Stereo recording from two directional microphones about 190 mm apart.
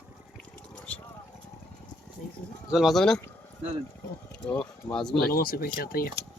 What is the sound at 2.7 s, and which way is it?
Speech, centre (ahead or behind).